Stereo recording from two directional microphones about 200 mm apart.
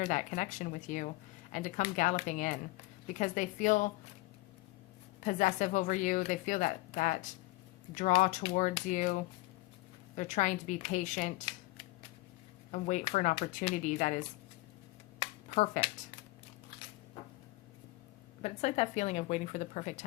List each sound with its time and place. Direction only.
0.0 s a woman's voice: 40° left (ahead or behind)
5.2 s a woman's voice: 40° left (ahead or behind)
12.7 s a woman's voice: 40° left (ahead or behind)
15.2 s a sound: 35° left (ahead or behind)
18.4 s a woman's voice: 35° left (ahead or behind)